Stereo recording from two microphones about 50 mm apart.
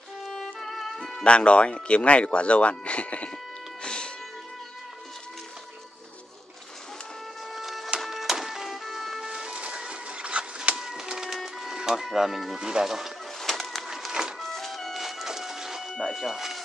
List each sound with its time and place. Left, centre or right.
0.2 s music: centre
1.2 s speech: left
3.8 s music: centre
7.5 s music: centre
9.2 s vehicle: centre
9.6 s a sound: centre
10.8 s music: centre
12.5 s speech: centre
13.4 s bird: centre
13.8 s music: centre
14.4 s music: centre
16.1 s speech: centre